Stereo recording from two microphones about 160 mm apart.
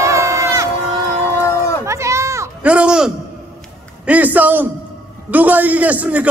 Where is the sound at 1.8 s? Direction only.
20° right (ahead or behind).